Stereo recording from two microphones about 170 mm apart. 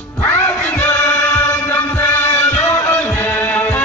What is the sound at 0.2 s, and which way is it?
Music, 10° left (ahead or behind).